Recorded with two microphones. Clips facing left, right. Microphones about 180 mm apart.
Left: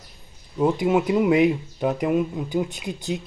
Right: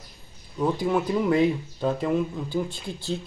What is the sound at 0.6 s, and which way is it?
Speech, 20° left (ahead or behind).